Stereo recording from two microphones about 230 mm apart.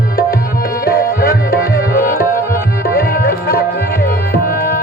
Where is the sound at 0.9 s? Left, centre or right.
Left.